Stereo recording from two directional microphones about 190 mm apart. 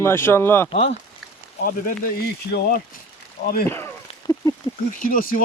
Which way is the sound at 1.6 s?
50° left (ahead or behind).